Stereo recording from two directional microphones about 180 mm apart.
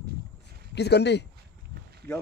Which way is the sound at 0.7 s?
70° left (ahead or behind).